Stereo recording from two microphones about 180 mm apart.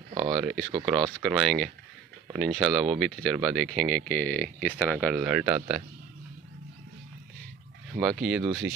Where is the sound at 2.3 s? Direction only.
Centre (ahead or behind).